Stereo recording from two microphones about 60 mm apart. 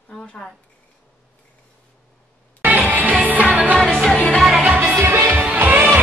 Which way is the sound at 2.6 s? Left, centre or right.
Right.